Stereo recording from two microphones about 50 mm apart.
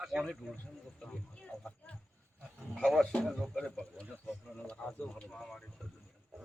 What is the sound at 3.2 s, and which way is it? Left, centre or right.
Speech, centre.